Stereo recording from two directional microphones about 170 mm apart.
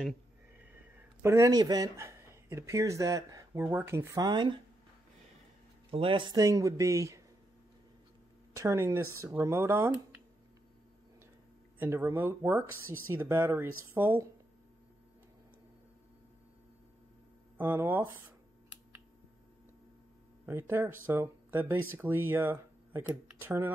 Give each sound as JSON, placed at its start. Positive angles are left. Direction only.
{"t": 0.6, "sound": "speech", "side_deg": -10}
{"t": 5.9, "sound": "speech", "side_deg": -30}
{"t": 6.4, "sound": "speech", "side_deg": -20}
{"t": 8.5, "sound": "speech", "side_deg": -15}
{"t": 11.8, "sound": "speech", "side_deg": -10}
{"t": 17.6, "sound": "speech", "side_deg": -10}
{"t": 20.4, "sound": "speech", "side_deg": -15}